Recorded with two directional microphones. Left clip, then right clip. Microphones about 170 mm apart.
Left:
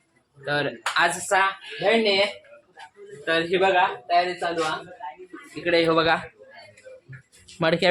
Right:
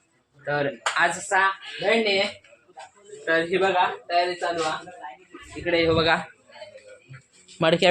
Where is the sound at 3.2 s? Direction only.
5° left (ahead or behind).